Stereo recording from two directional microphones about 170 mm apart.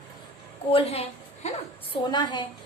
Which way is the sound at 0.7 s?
35° left (ahead or behind).